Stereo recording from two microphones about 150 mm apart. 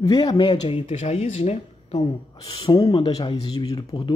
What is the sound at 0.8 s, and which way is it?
Speech, 50° left (ahead or behind).